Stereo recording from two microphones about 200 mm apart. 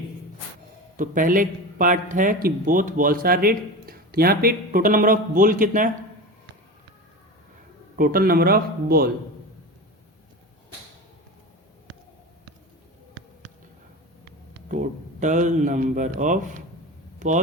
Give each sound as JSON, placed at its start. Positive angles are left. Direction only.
{"t": 0.9, "sound": "a man's voice", "side_deg": -40}
{"t": 7.9, "sound": "a man's voice", "side_deg": -45}
{"t": 14.7, "sound": "a man's voice", "side_deg": -40}